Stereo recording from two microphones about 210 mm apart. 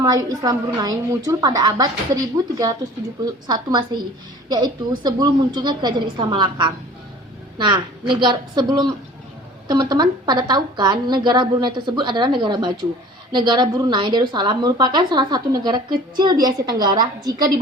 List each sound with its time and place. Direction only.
0.0 s a woman's voice: 15° right (ahead or behind)